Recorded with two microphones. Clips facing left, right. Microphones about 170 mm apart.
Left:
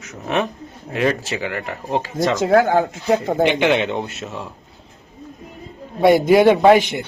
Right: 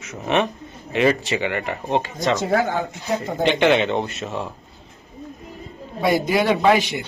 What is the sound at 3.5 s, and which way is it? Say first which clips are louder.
Speech: even; 10° left (ahead or behind).